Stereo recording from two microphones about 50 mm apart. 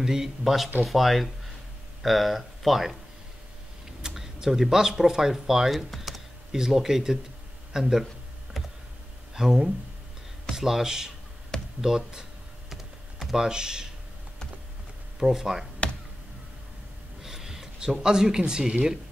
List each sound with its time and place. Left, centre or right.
0.0 s speech: centre
4.0 s speech: centre
8.6 s a sound: centre
9.3 s speech: centre
11.8 s computer keyboard: centre
13.2 s speech: centre
15.1 s speech: centre
15.8 s a sound: left
17.2 s a sound: centre
18.0 s speech: centre